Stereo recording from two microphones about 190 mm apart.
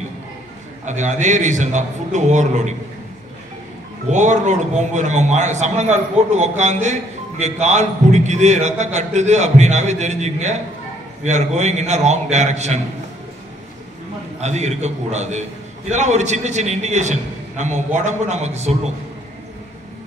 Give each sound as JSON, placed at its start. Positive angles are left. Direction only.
{"t": 0.8, "sound": "a man's voice", "side_deg": -40}
{"t": 4.1, "sound": "a man's voice", "side_deg": -40}
{"t": 14.4, "sound": "a man's voice", "side_deg": -35}